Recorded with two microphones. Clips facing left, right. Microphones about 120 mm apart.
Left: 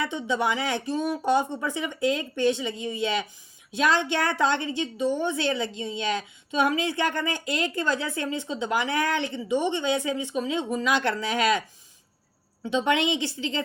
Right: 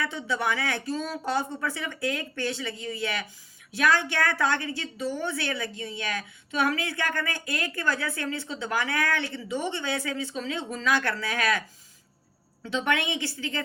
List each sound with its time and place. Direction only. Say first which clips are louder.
0.0 s a woman's voice: left 3 dB; 20° left (ahead or behind)
12.6 s a woman's voice: left 4 dB; 20° left (ahead or behind)